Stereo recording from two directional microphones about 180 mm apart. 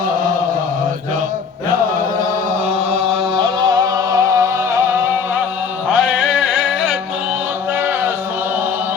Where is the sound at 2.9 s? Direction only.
30° right (ahead or behind).